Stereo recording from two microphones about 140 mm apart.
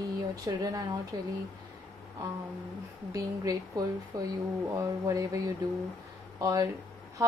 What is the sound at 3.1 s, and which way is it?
A woman's voice, 25° right (ahead or behind).